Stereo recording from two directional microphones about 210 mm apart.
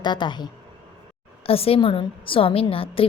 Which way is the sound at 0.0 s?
20° left (ahead or behind).